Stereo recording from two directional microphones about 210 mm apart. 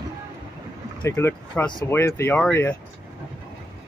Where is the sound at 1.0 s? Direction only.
15° left (ahead or behind).